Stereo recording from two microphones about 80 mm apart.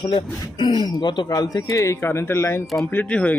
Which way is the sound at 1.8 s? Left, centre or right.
Left.